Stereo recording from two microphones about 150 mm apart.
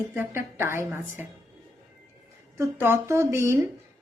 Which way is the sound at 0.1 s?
15° right (ahead or behind).